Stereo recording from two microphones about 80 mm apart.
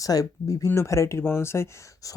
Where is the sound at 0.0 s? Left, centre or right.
Left.